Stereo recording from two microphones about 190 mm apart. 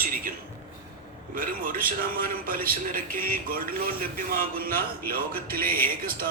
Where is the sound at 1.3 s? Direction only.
45° right (ahead or behind).